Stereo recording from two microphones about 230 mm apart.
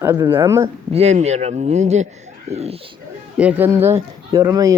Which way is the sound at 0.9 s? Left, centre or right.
Right.